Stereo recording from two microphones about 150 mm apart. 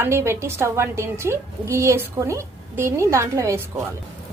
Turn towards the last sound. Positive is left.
turn(degrees=-20)  # may be behind; listen again after turning